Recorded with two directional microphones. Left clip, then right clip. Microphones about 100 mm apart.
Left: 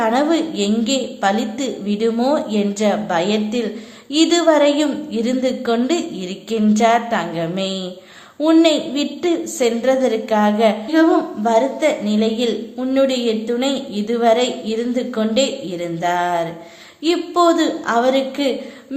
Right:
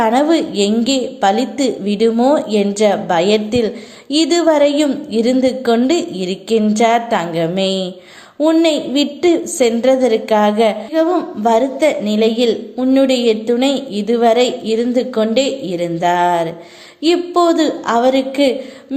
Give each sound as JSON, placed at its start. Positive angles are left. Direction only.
{"t": 0.0, "sound": "a woman's voice", "side_deg": -50}
{"t": 2.0, "sound": "a woman's voice", "side_deg": -30}
{"t": 2.3, "sound": "a woman's voice", "side_deg": -50}
{"t": 8.4, "sound": "a woman's voice", "side_deg": -25}
{"t": 8.6, "sound": "a woman's voice", "side_deg": -45}
{"t": 12.8, "sound": "a woman's voice", "side_deg": -45}